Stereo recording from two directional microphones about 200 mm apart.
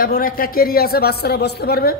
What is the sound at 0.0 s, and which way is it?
A woman's voice, 45° left (ahead or behind).